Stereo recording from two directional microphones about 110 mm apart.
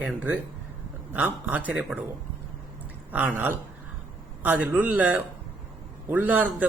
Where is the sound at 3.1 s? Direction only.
15° right (ahead or behind).